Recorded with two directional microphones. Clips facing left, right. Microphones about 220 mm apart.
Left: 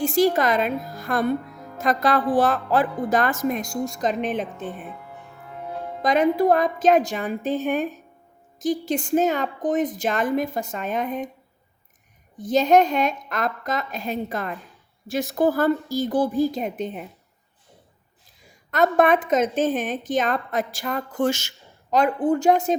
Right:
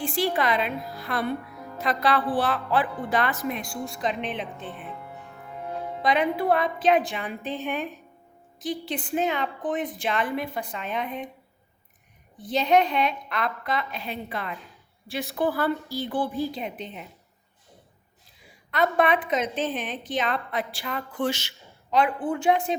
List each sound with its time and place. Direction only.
0.0 s a woman's voice: 45° left (ahead or behind)
6.0 s a woman's voice: 45° left (ahead or behind)
12.4 s a woman's voice: 45° left (ahead or behind)
18.4 s a woman's voice: 45° left (ahead or behind)